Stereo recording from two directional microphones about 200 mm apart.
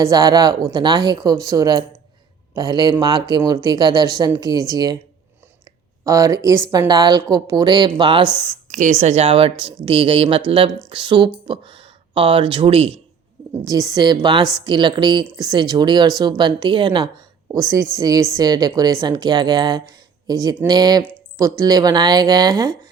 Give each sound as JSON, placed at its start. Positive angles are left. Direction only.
{"t": 0.0, "sound": "a woman's voice", "side_deg": -20}
{"t": 6.1, "sound": "a woman's voice", "side_deg": -15}
{"t": 8.6, "sound": "a woman's voice", "side_deg": -40}
{"t": 13.7, "sound": "a woman's voice", "side_deg": -15}